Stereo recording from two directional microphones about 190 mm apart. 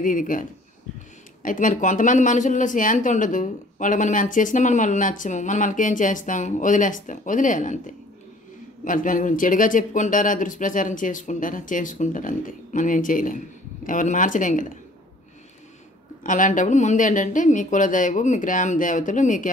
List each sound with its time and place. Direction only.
0.0 s speech: 45° left (ahead or behind)
16.3 s speech: 45° left (ahead or behind)